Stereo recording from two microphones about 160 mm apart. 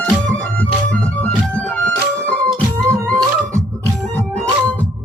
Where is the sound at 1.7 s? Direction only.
5° left (ahead or behind).